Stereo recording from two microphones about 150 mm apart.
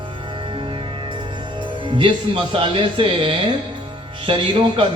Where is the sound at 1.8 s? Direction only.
35° right (ahead or behind).